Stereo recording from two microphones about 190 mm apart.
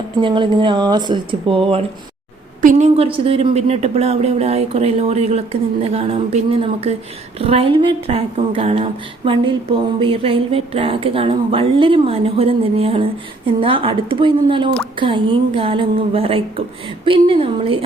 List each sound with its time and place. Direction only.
0.2 s a woman's voice: 25° right (ahead or behind)
2.6 s a woman's voice: 40° right (ahead or behind)